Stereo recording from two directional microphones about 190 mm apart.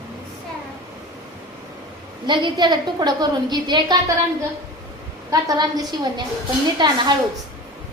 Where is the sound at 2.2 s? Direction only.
25° right (ahead or behind).